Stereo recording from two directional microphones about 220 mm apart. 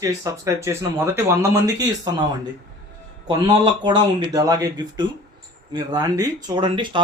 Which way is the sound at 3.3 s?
20° right (ahead or behind).